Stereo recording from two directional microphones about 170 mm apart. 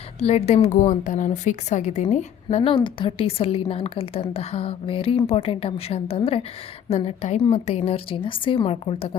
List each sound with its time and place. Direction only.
0.2 s a woman's voice: 40° left (ahead or behind)